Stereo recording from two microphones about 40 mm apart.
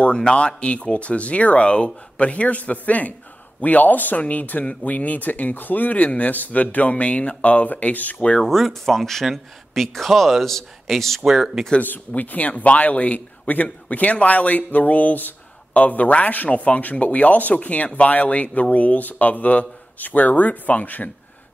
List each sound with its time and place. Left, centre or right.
0.2 s speech: left
8.4 s speech: centre
12.1 s speech: left